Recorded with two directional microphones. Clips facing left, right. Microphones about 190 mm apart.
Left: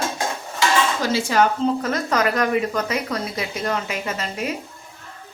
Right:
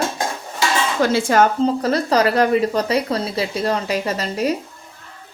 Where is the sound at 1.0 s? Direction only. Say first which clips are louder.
Right 8 dB; 55° right (ahead or behind).